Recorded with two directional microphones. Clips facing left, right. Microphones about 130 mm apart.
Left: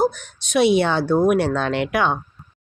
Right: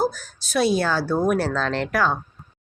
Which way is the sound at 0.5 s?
20° left (ahead or behind).